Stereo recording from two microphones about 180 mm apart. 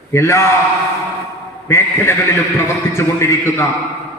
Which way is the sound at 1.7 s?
15° left (ahead or behind).